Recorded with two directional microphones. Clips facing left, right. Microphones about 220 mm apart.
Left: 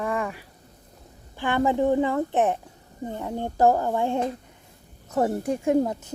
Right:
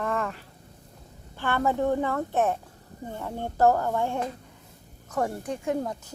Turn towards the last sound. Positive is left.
turn(degrees=25)  # may be behind; listen again after turning